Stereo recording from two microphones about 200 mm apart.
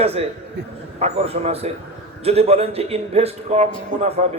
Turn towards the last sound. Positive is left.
turn(degrees=-30)  # may be behind; listen again after turning